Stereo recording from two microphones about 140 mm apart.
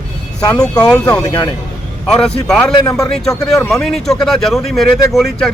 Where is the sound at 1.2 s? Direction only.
25° left (ahead or behind).